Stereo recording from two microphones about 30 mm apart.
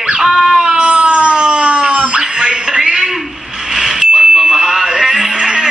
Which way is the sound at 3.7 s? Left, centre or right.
Right.